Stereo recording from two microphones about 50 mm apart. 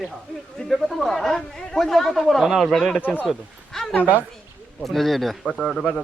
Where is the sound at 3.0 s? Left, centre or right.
Left.